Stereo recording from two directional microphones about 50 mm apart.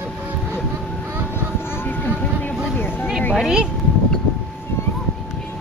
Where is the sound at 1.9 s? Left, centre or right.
Left.